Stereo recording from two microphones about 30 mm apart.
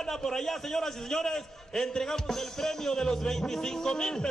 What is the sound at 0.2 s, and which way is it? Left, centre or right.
A man's voice, centre.